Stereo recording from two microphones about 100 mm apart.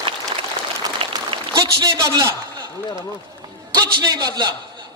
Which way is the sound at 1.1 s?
40° right (ahead or behind).